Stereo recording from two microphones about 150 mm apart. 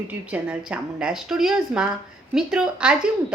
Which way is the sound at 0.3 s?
10° right (ahead or behind).